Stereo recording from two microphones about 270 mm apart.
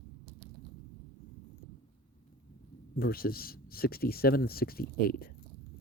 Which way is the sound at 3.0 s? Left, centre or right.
Left.